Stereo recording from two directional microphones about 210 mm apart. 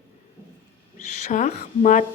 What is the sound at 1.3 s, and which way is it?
Speech, 35° left (ahead or behind).